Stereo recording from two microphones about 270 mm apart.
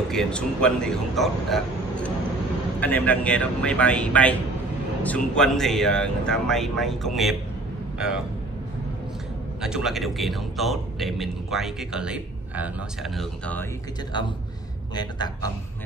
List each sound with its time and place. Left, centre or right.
0.1 s a man's voice: centre
9.6 s a man's voice: centre
14.1 s speech: centre